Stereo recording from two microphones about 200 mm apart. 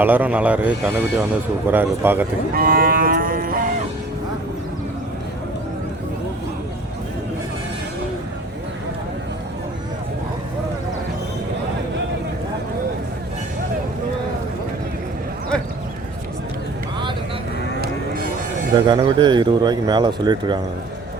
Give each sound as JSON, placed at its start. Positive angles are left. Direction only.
{"t": 0.0, "sound": "speech", "side_deg": -10}
{"t": 2.6, "sound": "cattle", "side_deg": -45}
{"t": 18.9, "sound": "speech", "side_deg": -20}